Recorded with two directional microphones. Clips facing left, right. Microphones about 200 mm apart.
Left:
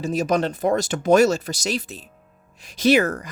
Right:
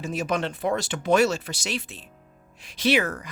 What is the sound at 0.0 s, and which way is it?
Speech, 40° left (ahead or behind).